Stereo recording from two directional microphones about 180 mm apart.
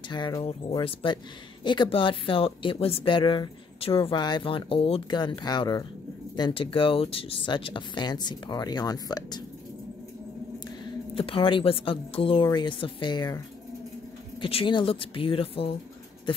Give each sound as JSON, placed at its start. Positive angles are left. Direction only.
{"t": 0.1, "sound": "speech", "side_deg": 25}
{"t": 11.1, "sound": "speech", "side_deg": 30}
{"t": 14.4, "sound": "speech", "side_deg": 30}
{"t": 16.3, "sound": "dog", "side_deg": 30}